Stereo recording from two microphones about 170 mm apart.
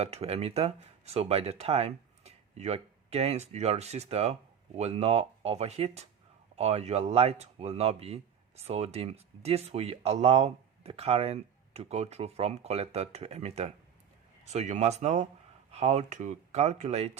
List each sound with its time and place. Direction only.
0.0 s speech: 40° right (ahead or behind)